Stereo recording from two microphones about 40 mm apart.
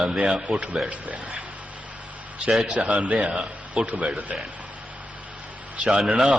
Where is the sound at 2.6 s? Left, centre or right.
Right.